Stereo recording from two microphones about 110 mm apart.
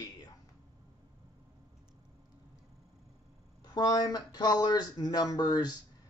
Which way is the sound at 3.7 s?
35° left (ahead or behind).